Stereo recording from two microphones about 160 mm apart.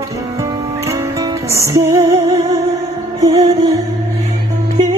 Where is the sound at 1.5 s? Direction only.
15° right (ahead or behind).